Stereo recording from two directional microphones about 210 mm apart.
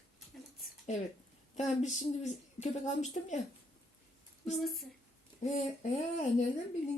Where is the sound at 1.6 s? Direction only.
35° left (ahead or behind).